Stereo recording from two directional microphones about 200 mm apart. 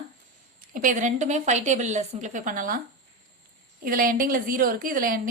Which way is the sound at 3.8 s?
45° right (ahead or behind).